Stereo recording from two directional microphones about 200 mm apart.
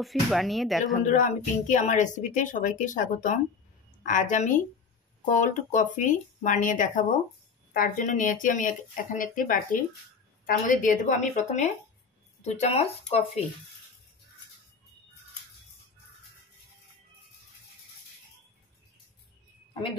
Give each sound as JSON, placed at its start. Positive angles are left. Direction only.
{"t": 0.0, "sound": "speech", "side_deg": 0}
{"t": 1.0, "sound": "a woman's voice", "side_deg": 40}